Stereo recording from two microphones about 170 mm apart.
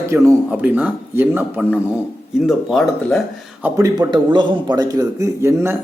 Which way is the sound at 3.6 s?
20° right (ahead or behind).